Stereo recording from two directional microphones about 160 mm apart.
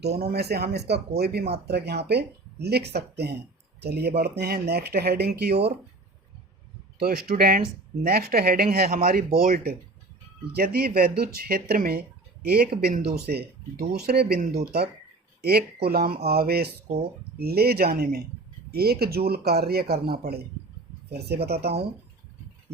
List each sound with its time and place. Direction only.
0.0 s speech: 85° right
4.2 s speech: 75° right (ahead or behind); by 5.7 s 90° right
7.3 s speech: 70° right (ahead or behind)
10.4 s speech: 80° right
13.1 s speech: 85° right
21.4 s speech: 90° right